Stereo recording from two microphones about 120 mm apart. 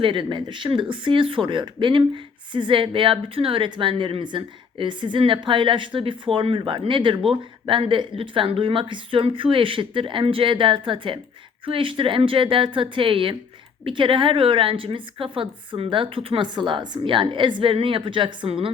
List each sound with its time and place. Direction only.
0.0 s speech: 40° right (ahead or behind)